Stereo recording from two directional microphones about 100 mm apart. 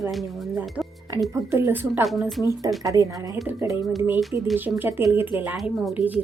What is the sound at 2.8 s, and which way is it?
Speech, 35° right (ahead or behind).